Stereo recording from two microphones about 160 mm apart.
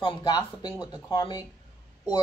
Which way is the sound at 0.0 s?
30° left (ahead or behind).